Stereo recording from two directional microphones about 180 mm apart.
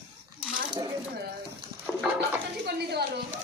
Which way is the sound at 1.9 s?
Centre (ahead or behind).